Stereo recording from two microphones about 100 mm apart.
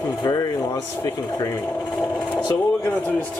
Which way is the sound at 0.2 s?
40° left (ahead or behind).